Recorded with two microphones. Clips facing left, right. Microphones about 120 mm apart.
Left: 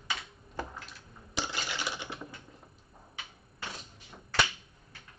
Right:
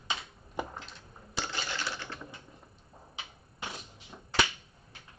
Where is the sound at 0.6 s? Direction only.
15° right (ahead or behind).